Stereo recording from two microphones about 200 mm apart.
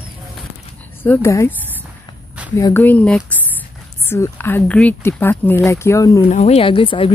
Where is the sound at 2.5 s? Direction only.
15° left (ahead or behind).